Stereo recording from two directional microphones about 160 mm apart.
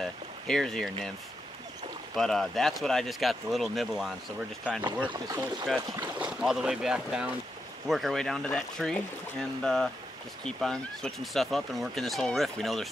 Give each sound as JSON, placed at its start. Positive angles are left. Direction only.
{"t": 0.0, "sound": "a sound", "side_deg": 0}
{"t": 2.1, "sound": "speech", "side_deg": 0}
{"t": 5.8, "sound": "speech", "side_deg": -20}
{"t": 6.1, "sound": "speech", "side_deg": -5}